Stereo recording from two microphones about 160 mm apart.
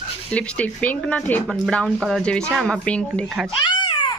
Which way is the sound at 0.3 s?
10° left (ahead or behind).